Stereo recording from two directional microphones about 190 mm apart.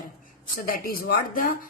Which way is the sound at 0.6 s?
50° left (ahead or behind).